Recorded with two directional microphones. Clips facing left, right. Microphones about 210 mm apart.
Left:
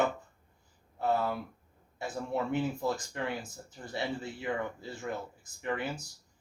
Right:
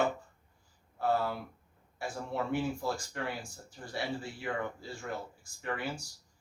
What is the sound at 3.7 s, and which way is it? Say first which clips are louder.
Speech: left 1 dB; 20° left (ahead or behind).